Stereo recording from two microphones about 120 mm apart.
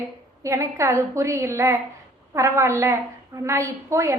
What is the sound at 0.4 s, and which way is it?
A woman's voice, 25° right (ahead or behind).